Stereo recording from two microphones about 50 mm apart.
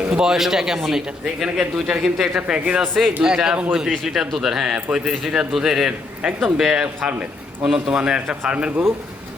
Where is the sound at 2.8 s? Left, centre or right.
Centre.